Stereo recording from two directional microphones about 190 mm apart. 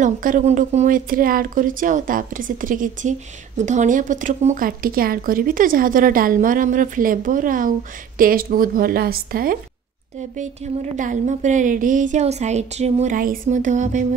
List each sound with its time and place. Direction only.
0.0 s speech: 45° right (ahead or behind)
10.3 s a woman's voice: 40° right (ahead or behind)